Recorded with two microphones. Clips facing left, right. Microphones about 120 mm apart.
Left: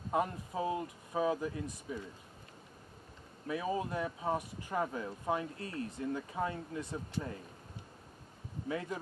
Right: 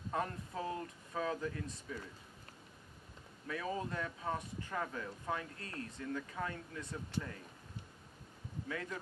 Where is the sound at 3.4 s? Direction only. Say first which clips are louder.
Left 4 dB; 20° left (ahead or behind).